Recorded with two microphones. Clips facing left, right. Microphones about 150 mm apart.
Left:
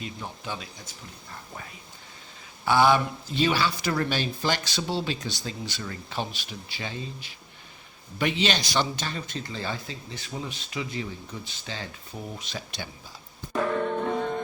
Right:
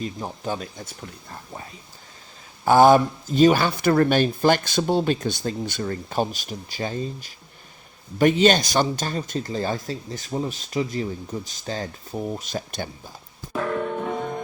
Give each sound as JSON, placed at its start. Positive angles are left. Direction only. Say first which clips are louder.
{"t": 0.0, "sound": "speech", "louder": "right 7 dB", "side_deg": -40}
{"t": 2.6, "sound": "speech", "louder": "right 7 dB", "side_deg": -45}
{"t": 13.5, "sound": "music", "louder": "even", "side_deg": -5}